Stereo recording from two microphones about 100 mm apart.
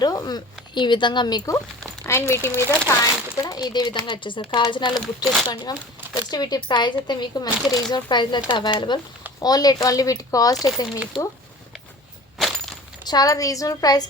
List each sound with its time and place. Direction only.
0.0 s speech: 40° left (ahead or behind)
0.7 s speech: 50° left (ahead or behind)
2.0 s speech: 30° left (ahead or behind)
3.0 s speech: 35° left (ahead or behind)
4.9 s speech: centre (ahead or behind)
5.7 s speech: 40° left (ahead or behind)
9.4 s speech: 40° left (ahead or behind)
13.1 s speech: 40° left (ahead or behind)